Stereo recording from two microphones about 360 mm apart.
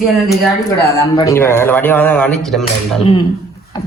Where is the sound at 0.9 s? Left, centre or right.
Centre.